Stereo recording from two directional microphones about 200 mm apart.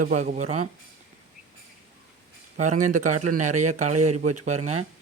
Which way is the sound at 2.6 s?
40° right (ahead or behind).